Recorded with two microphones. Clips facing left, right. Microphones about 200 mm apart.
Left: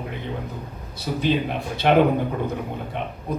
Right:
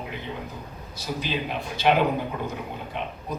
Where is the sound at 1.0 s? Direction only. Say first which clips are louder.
Left 7 dB; 60° left (ahead or behind).